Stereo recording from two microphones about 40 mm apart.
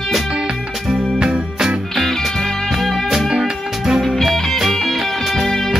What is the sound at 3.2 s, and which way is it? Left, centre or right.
Music, right.